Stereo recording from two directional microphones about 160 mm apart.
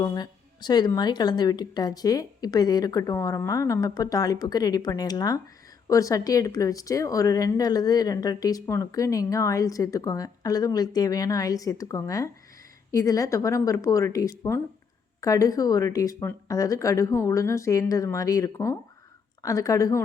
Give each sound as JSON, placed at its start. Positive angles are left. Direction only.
{"t": 0.0, "sound": "speech", "side_deg": 25}